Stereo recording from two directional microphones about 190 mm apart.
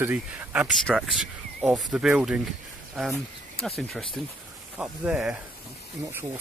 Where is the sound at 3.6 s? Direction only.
Centre (ahead or behind).